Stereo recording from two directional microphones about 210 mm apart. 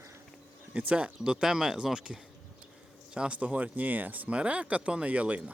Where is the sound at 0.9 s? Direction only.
5° right (ahead or behind).